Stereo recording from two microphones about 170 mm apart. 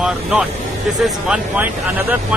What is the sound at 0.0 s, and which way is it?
Speech, 5° right (ahead or behind).